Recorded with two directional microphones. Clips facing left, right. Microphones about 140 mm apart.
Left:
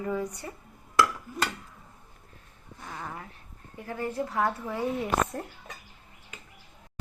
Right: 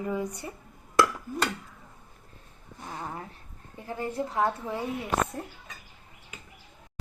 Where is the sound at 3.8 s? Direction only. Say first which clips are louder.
Even; 20° right (ahead or behind).